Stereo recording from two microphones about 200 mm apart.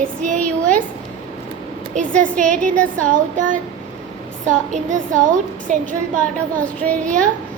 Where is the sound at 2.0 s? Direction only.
5° left (ahead or behind).